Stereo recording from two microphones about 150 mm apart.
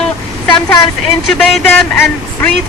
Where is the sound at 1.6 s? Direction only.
10° left (ahead or behind).